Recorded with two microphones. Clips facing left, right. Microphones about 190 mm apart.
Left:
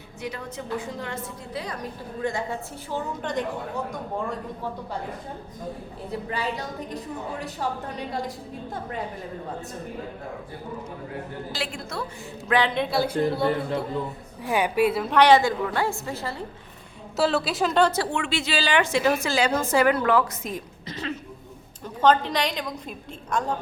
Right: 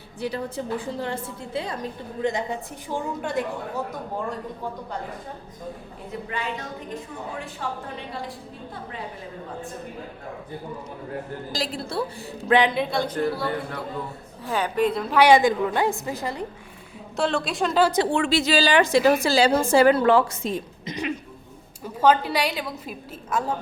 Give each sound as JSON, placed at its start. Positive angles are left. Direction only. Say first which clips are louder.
{"t": 0.2, "sound": "a woman's voice", "louder": "right 5 dB", "side_deg": -30}
{"t": 6.1, "sound": "a woman's voice", "louder": "left 2 dB", "side_deg": 35}
{"t": 11.5, "sound": "a woman's voice", "louder": "right 5 dB", "side_deg": -35}
{"t": 12.5, "sound": "a woman's voice", "louder": "right 4 dB", "side_deg": -20}
{"t": 12.7, "sound": "a woman's voice", "louder": "left 1 dB", "side_deg": 0}
{"t": 13.1, "sound": "a man's voice", "louder": "left 2 dB", "side_deg": 25}
{"t": 14.4, "sound": "a woman's voice", "louder": "left 1 dB", "side_deg": 10}
{"t": 15.2, "sound": "a woman's voice", "louder": "right 1 dB", "side_deg": -15}
{"t": 17.2, "sound": "a woman's voice", "louder": "left 1 dB", "side_deg": 5}
{"t": 18.1, "sound": "a woman's voice", "louder": "right 6 dB", "side_deg": -35}
{"t": 20.9, "sound": "a woman's voice", "louder": "right 3 dB", "side_deg": -15}